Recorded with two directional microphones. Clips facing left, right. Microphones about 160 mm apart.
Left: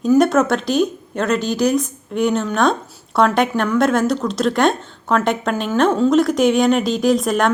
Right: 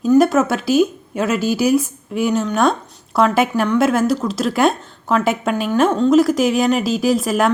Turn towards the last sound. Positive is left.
turn(degrees=-5)  # may be behind; listen again after turning